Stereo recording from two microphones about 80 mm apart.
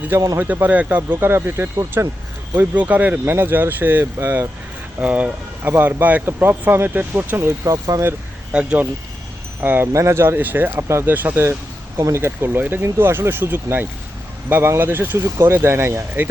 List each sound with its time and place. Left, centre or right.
0.3 s speech: right
2.6 s speech: centre
7.6 s speech: right
8.5 s speech: centre
9.9 s speech: right
11.9 s speech: right
12.2 s speech: right